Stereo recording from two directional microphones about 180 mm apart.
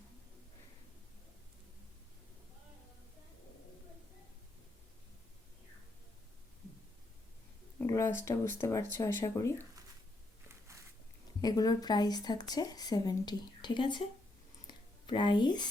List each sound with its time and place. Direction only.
7.8 s speech: 15° left (ahead or behind)
11.3 s speech: 20° left (ahead or behind)
14.7 s a sound: 25° left (ahead or behind)